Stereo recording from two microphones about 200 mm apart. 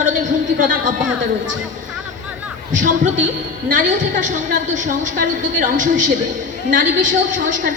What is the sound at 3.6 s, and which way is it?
A woman's voice, 40° right (ahead or behind).